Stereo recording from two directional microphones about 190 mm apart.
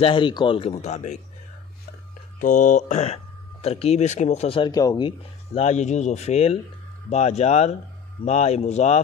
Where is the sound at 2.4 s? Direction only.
40° left (ahead or behind).